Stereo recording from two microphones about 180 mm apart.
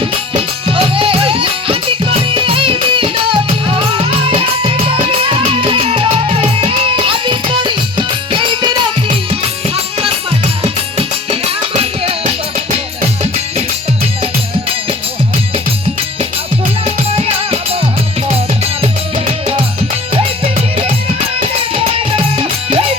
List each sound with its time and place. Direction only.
0.7 s music: 30° right (ahead or behind)
16.8 s music: 35° right (ahead or behind)
20.1 s music: 30° right (ahead or behind)